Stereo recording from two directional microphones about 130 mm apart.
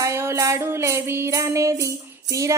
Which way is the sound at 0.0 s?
20° right (ahead or behind).